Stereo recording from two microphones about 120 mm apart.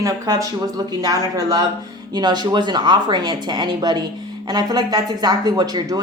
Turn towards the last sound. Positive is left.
turn(degrees=-35)  # may be behind; listen again after turning